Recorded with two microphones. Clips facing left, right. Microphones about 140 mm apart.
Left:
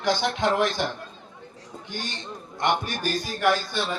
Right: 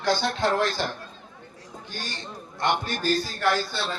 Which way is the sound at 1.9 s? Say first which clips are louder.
Left 2 dB; 20° left (ahead or behind).